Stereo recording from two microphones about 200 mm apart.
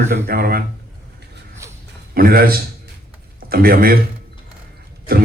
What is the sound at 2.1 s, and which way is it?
A man's voice, 50° right (ahead or behind).